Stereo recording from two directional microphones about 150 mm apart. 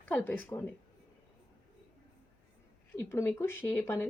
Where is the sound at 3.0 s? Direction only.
15° left (ahead or behind).